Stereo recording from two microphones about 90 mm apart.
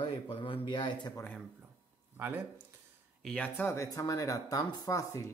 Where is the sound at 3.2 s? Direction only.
15° left (ahead or behind).